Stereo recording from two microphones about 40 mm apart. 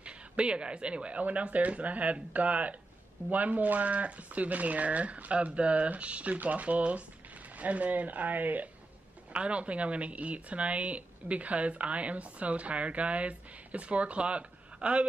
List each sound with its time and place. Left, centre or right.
0.0 s speech: right
9.3 s speech: right